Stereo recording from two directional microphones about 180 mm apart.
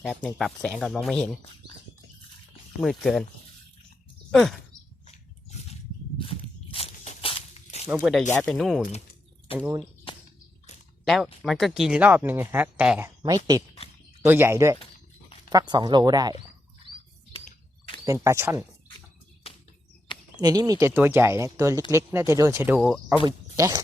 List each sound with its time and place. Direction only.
0.0 s speech: centre (ahead or behind)
2.8 s speech: centre (ahead or behind)
4.3 s speech: centre (ahead or behind)
5.0 s a sound: 35° left (ahead or behind)
7.9 s speech: 5° right (ahead or behind)
9.5 s speech: 30° left (ahead or behind)
11.0 s speech: centre (ahead or behind)
13.2 s speech: 20° right (ahead or behind)
18.0 s speech: 15° right (ahead or behind)
20.4 s speech: 20° right (ahead or behind)